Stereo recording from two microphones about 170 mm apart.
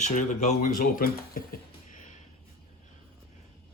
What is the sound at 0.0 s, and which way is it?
Speech, 45° left (ahead or behind).